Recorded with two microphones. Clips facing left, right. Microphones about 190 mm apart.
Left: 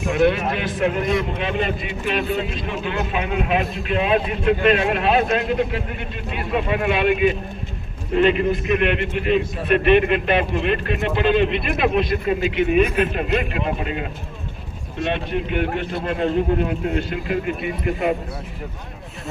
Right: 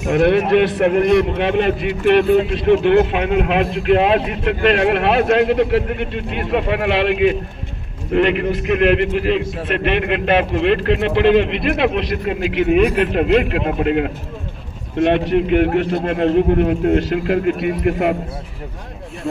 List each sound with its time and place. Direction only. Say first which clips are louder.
0.1 s a man's voice: right 6 dB; 65° right (ahead or behind)